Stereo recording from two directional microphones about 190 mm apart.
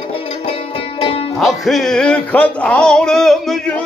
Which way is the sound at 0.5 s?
30° left (ahead or behind).